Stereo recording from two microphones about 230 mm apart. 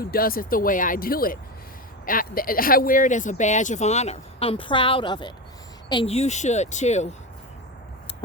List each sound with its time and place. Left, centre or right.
0.0 s speech: left